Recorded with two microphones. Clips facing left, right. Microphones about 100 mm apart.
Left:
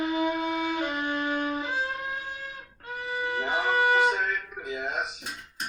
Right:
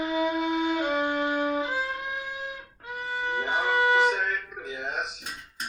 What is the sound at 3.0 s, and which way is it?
Music, 25° right (ahead or behind).